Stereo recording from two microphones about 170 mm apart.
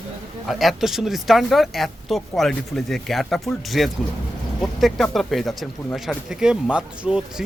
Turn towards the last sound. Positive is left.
turn(degrees=-5)  # may be behind; listen again after turning